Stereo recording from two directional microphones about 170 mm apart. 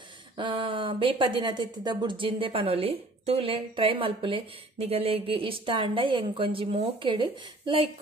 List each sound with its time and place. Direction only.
0.4 s speech: 30° right (ahead or behind)